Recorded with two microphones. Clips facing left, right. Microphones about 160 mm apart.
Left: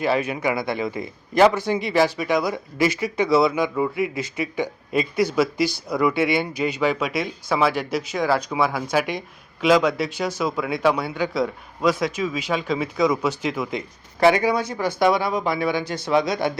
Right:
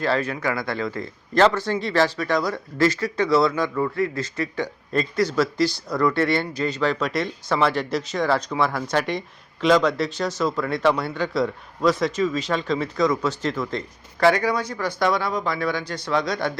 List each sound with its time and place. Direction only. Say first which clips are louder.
0.0 s speech: left 1 dB; 15° left (ahead or behind)
14.2 s speech: left 2 dB; 20° left (ahead or behind)
15.0 s a man's voice: left 3 dB; 10° left (ahead or behind)